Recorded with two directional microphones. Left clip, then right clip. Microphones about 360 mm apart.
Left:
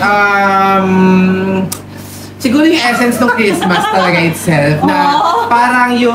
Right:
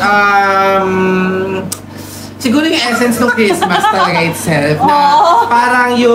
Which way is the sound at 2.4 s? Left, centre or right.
Centre.